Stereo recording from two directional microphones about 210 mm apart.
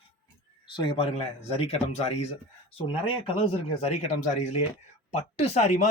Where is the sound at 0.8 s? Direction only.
25° left (ahead or behind).